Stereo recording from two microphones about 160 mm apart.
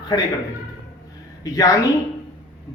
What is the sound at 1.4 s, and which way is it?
Speech, 20° left (ahead or behind).